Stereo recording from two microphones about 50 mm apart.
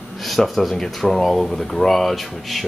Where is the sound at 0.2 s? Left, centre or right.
Centre.